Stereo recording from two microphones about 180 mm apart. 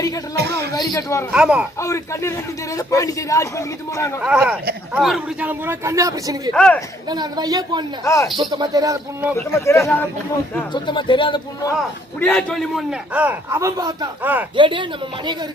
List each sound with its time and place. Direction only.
0.3 s speech: 65° right (ahead or behind)
0.7 s a man's voice: 20° left (ahead or behind)
1.3 s speech: 5° right (ahead or behind)
1.8 s a man's voice: 15° left (ahead or behind)
4.2 s a man's voice: 5° right (ahead or behind)
6.5 s speech: 5° left (ahead or behind)
7.1 s speech: 25° right (ahead or behind)
8.0 s a man's voice: 15° left (ahead or behind)
8.4 s speech: 25° right (ahead or behind)
9.3 s a man's voice: 15° left (ahead or behind)
10.7 s a man's voice: 25° left (ahead or behind)
12.2 s a man's voice: 5° left (ahead or behind); by 14.1 s 20° right (ahead or behind)
14.2 s a man's voice: 10° right (ahead or behind)
14.5 s speech: 25° right (ahead or behind)